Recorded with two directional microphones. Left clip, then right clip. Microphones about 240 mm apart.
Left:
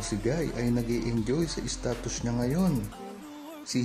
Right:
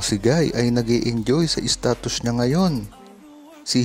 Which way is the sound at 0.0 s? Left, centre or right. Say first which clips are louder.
Right 10 dB; right.